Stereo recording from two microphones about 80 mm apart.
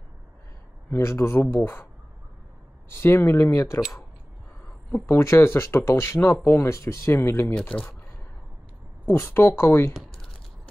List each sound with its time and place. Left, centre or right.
0.8 s speech: left
2.9 s speech: left
5.0 s speech: left
9.0 s speech: left
9.9 s typing: centre